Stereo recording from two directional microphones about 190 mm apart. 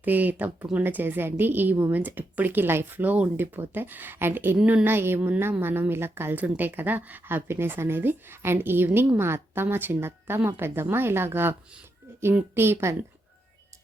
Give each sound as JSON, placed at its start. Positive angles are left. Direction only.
{"t": 0.0, "sound": "a woman's voice", "side_deg": -10}